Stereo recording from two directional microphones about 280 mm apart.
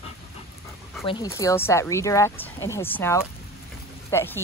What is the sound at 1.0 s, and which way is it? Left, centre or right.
Speech, centre.